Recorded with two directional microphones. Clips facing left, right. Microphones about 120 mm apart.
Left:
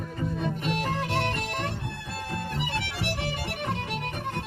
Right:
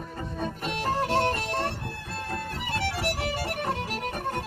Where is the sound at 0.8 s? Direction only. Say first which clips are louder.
Right 8 dB; 35° right (ahead or behind).